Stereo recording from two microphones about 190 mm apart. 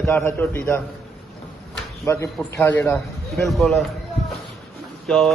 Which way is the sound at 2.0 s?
15° left (ahead or behind).